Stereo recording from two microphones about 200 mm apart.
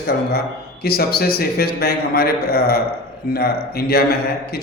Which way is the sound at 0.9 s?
50° left (ahead or behind).